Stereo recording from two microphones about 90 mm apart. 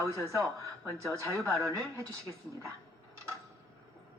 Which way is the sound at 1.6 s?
40° right (ahead or behind).